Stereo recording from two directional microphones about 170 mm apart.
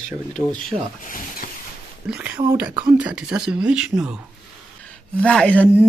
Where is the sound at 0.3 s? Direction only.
5° left (ahead or behind).